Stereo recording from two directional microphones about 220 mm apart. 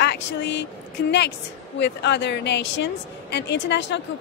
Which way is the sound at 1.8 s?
50° left (ahead or behind).